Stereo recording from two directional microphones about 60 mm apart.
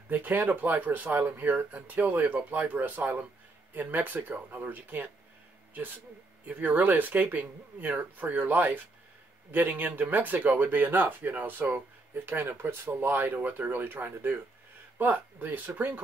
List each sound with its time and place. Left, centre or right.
0.1 s speech: right
6.4 s speech: right